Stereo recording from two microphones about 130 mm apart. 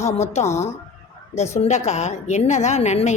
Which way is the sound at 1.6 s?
60° left (ahead or behind).